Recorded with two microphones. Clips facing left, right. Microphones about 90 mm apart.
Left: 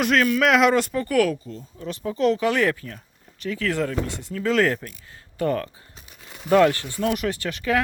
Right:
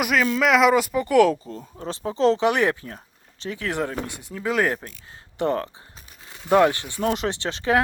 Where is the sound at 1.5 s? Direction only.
40° right (ahead or behind).